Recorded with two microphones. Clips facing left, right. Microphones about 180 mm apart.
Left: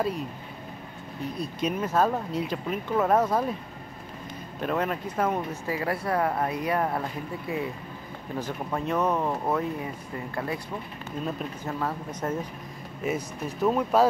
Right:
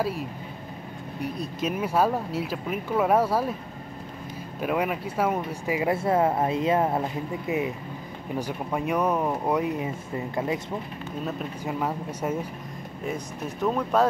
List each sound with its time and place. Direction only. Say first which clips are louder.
1.4 s speech: left 1 dB; 5° right (ahead or behind)
4.6 s speech: right 1 dB; 10° right (ahead or behind)
11.6 s speech: right 3 dB; 15° right (ahead or behind)
13.0 s speech: left 2 dB; 5° left (ahead or behind)